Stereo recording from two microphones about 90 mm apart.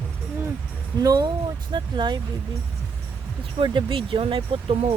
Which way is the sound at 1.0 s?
50° right (ahead or behind).